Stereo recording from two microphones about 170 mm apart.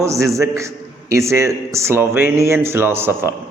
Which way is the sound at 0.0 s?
15° right (ahead or behind).